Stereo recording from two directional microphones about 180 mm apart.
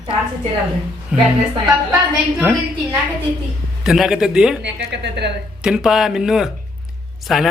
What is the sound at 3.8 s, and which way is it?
Speech, 5° right (ahead or behind).